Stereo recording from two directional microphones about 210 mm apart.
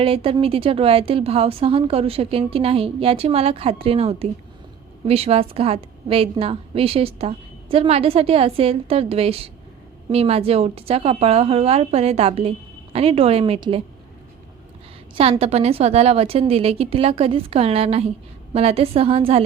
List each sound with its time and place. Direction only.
0.0 s a woman's voice: 25° right (ahead or behind)
15.1 s a woman's voice: 30° right (ahead or behind)